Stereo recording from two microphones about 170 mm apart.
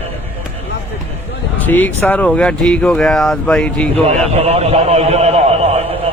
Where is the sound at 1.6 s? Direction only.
10° left (ahead or behind).